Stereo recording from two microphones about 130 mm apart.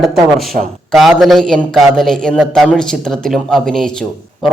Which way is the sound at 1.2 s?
Centre (ahead or behind).